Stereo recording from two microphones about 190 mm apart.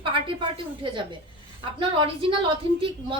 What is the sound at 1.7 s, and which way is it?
Speech, 25° right (ahead or behind).